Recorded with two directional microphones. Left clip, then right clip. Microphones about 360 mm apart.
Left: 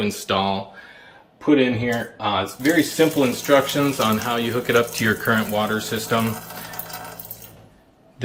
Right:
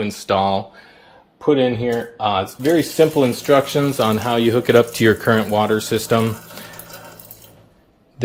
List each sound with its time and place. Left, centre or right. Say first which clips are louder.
0.0 s speech: right 4 dB; centre